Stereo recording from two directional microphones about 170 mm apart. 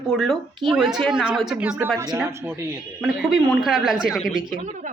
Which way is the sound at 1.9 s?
20° right (ahead or behind).